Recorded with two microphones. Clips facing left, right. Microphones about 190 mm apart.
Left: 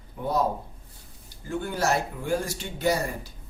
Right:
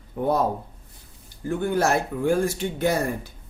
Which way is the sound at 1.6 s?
55° right (ahead or behind).